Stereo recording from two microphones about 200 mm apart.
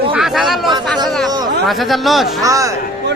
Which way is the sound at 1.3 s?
20° right (ahead or behind).